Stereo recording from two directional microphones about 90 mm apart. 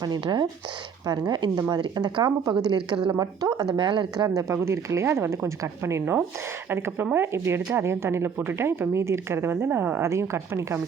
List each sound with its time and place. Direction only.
0.0 s speech: 55° right (ahead or behind)
2.6 s speech: 60° right (ahead or behind)
3.2 s speech: 45° right (ahead or behind)
3.8 s speech: 60° right (ahead or behind)
4.4 s speech: 35° right (ahead or behind)